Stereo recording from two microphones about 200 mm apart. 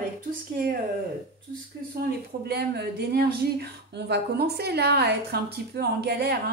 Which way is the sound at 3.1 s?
50° right (ahead or behind).